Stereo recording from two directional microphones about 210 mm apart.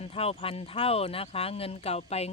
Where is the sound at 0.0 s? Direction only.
30° left (ahead or behind).